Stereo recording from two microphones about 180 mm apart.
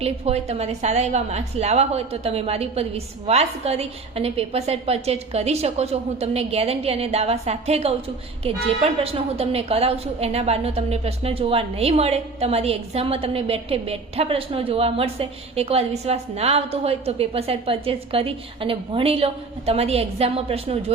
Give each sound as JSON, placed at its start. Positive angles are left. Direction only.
{"t": 0.0, "sound": "a woman's voice", "side_deg": -35}